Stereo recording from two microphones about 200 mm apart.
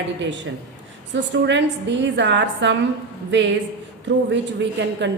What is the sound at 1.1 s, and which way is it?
A woman's voice, 65° right (ahead or behind).